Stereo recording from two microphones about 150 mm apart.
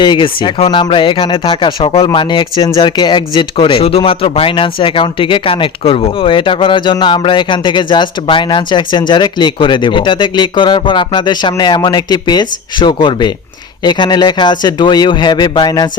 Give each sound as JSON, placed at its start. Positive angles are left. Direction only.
{"t": 0.0, "sound": "a man's voice", "side_deg": 30}